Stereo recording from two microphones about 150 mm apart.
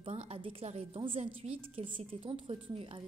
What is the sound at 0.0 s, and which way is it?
A woman's voice, 40° right (ahead or behind).